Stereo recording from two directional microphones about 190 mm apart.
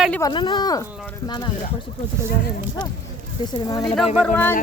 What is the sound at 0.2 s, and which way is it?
Speech, 25° left (ahead or behind).